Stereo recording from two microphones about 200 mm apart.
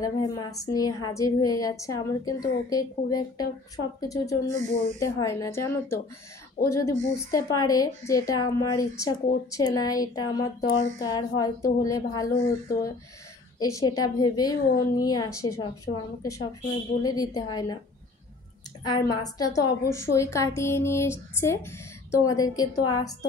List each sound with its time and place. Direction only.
0.0 s a woman's voice: 20° left (ahead or behind)
18.9 s a woman's voice: 20° left (ahead or behind)